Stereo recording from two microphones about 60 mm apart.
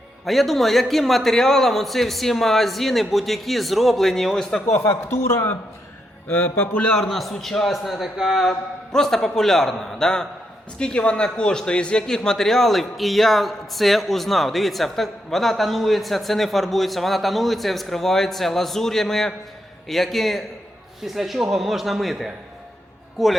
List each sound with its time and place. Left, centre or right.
0.3 s a man's voice: centre
4.6 s a man's voice: left
6.2 s speech: left
7.0 s a man's voice: centre
8.4 s a man's voice: centre